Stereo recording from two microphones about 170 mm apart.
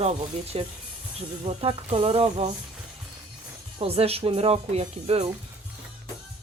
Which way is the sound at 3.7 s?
35° right (ahead or behind).